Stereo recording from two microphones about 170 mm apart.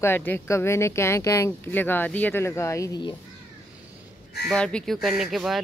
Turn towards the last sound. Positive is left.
turn(degrees=0)  # may be behind; listen again after turning